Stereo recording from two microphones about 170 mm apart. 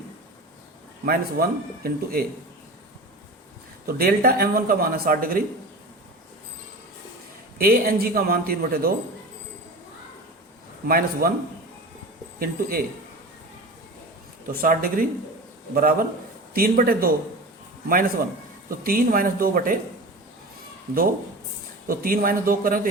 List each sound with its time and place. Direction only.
1.0 s speech: 60° right (ahead or behind)
3.8 s speech: 60° right (ahead or behind)
7.6 s speech: 60° right (ahead or behind)
10.8 s speech: 60° right (ahead or behind)
12.4 s speech: 60° right (ahead or behind)
14.4 s speech: 60° right (ahead or behind)
21.8 s speech: 60° right (ahead or behind)